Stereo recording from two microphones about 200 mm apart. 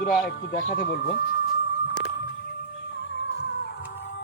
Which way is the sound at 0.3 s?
40° left (ahead or behind).